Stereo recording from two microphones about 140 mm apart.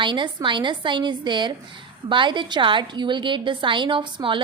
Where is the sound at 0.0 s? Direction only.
35° right (ahead or behind).